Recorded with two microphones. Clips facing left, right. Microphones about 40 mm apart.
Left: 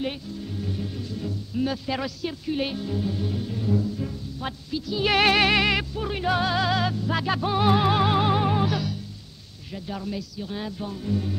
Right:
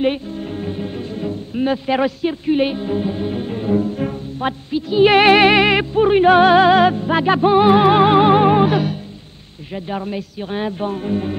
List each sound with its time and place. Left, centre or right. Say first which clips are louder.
0.0 s speech: right 11 dB; right